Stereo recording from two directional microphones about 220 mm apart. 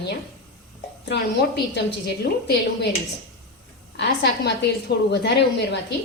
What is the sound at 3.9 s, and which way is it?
A woman's voice, 50° left (ahead or behind).